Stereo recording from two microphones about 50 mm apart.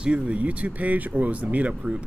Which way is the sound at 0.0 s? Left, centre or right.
Right.